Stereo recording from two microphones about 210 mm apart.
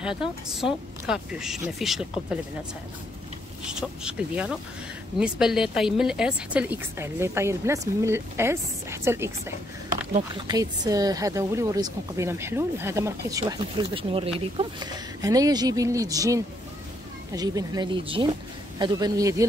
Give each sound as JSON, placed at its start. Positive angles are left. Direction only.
{"t": 1.0, "sound": "speech", "side_deg": 0}
{"t": 4.0, "sound": "speech", "side_deg": -5}
{"t": 10.4, "sound": "speech", "side_deg": -20}